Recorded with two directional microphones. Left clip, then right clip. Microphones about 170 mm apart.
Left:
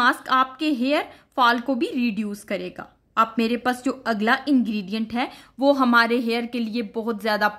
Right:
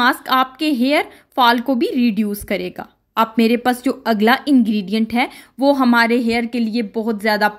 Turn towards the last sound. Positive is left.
turn(degrees=-15)  # may be behind; listen again after turning